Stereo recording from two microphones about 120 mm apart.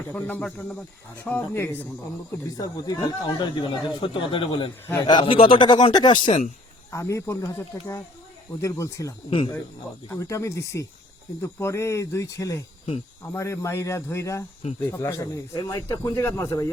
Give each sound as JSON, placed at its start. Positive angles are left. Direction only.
{"t": 0.1, "sound": "speech", "side_deg": 15}
{"t": 2.6, "sound": "speech", "side_deg": 35}
{"t": 6.9, "sound": "speech", "side_deg": 25}
{"t": 10.2, "sound": "speech", "side_deg": 25}